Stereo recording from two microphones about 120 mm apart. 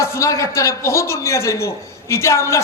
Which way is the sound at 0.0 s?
25° left (ahead or behind).